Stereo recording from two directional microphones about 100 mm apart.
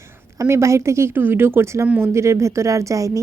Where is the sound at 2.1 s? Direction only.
30° right (ahead or behind).